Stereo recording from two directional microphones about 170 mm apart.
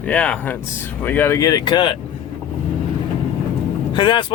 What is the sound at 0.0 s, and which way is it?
Speech, 10° left (ahead or behind).